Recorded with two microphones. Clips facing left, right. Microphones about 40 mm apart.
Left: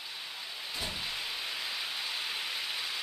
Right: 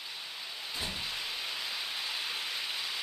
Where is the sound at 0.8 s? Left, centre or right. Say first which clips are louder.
Even; centre.